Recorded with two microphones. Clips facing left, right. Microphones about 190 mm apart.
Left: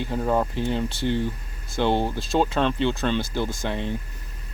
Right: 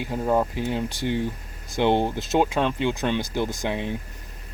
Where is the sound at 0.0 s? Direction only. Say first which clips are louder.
Right 1 dB; 10° right (ahead or behind).